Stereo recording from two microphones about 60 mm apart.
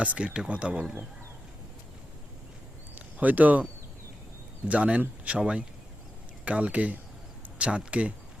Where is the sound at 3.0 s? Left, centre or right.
Right.